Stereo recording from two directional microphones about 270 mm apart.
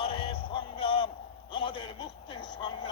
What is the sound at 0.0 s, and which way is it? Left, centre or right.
Music, centre.